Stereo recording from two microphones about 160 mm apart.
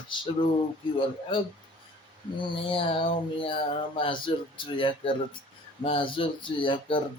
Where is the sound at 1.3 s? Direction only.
30° left (ahead or behind).